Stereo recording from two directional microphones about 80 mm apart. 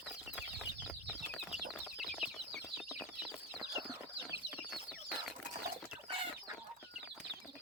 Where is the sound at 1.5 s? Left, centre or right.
Centre.